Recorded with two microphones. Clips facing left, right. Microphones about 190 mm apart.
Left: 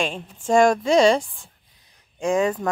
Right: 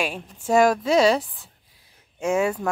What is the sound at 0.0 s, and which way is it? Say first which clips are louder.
A woman's voice: left 1 dB; 10° right (ahead or behind).